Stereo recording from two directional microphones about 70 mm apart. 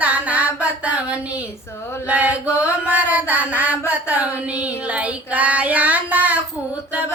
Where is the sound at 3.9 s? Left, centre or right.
Right.